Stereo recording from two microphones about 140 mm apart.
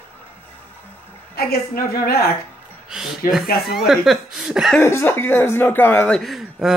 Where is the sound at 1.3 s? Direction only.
90° left.